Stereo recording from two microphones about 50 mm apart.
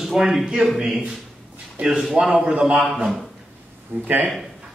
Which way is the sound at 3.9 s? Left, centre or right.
Right.